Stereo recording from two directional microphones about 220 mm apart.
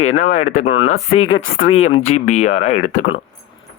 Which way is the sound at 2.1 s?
30° left (ahead or behind).